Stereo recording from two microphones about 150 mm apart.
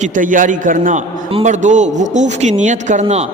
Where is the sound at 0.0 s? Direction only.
60° right (ahead or behind).